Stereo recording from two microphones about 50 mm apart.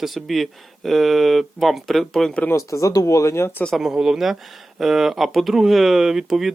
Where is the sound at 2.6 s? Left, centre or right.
Left.